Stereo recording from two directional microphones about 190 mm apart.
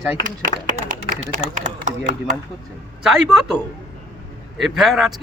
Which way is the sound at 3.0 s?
5° right (ahead or behind).